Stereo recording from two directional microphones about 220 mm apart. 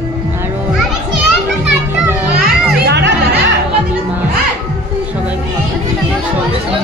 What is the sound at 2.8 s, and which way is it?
Music, 50° right (ahead or behind).